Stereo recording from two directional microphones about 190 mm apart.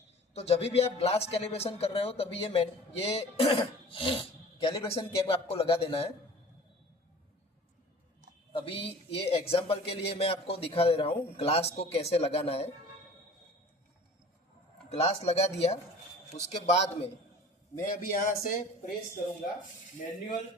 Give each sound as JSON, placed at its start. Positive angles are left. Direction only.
{"t": 0.3, "sound": "a man's voice", "side_deg": 35}
{"t": 8.5, "sound": "a man's voice", "side_deg": 30}
{"t": 14.8, "sound": "a man's voice", "side_deg": 35}
{"t": 17.7, "sound": "a man's voice", "side_deg": 45}